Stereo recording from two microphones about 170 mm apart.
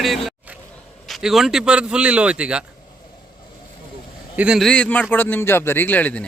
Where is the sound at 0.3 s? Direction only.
5° right (ahead or behind).